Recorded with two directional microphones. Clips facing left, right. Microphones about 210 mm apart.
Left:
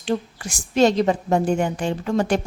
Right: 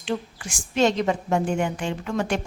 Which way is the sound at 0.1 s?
35° left (ahead or behind).